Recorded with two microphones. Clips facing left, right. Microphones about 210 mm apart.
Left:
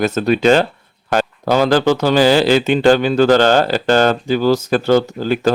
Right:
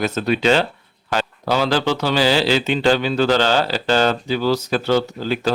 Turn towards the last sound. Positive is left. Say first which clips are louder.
# left 5 dB
turn(degrees=50)  # may be behind; listen again after turning